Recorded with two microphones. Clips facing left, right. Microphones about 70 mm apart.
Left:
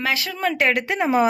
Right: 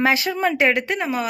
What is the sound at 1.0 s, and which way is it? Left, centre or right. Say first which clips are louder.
Speech: left 6 dB; left.